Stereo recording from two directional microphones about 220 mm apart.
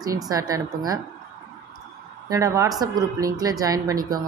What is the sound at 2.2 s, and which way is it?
Speech, 15° right (ahead or behind).